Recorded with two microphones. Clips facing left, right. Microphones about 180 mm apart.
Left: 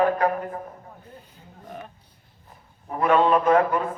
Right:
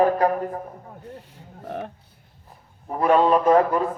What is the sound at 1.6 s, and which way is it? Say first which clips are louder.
Speech: right 8 dB; 70° right (ahead or behind).